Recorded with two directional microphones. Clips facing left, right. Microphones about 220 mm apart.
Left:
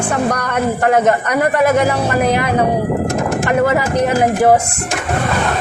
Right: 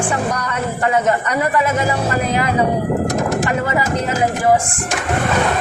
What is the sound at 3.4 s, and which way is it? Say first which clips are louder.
Speech: left 5 dB; 55° left (ahead or behind).